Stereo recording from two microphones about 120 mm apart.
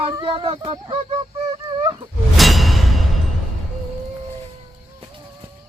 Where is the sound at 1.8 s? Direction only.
40° right (ahead or behind).